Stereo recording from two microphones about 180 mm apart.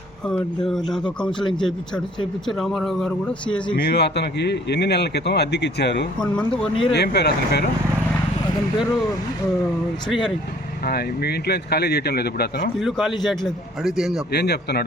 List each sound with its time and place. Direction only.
0.3 s speech: 5° left (ahead or behind)
3.8 s speech: 65° left (ahead or behind)
10.8 s speech: 60° left (ahead or behind)
12.8 s speech: centre (ahead or behind)
14.3 s speech: 65° left (ahead or behind)